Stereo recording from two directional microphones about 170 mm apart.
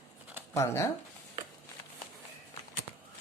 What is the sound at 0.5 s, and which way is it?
Speech, 15° left (ahead or behind).